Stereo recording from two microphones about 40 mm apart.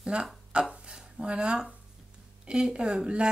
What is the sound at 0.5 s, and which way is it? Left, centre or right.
Speech, right.